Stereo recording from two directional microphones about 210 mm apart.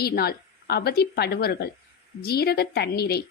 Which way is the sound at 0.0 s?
45° left (ahead or behind).